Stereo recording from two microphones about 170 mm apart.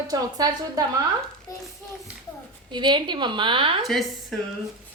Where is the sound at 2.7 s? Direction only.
25° right (ahead or behind).